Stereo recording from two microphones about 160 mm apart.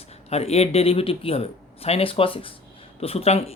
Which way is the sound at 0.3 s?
40° left (ahead or behind).